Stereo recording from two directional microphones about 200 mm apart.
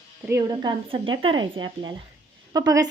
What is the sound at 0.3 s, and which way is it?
A woman's voice, 15° right (ahead or behind).